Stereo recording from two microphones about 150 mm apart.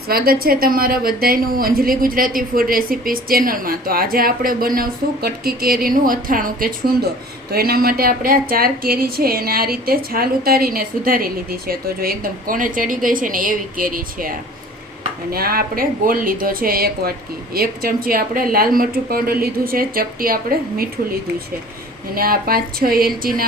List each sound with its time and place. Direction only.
0.1 s a woman's voice: 80° right
7.5 s a woman's voice: 90° right; by 14.3 s 70° right (ahead or behind)
15.3 s a woman's voice: 90° right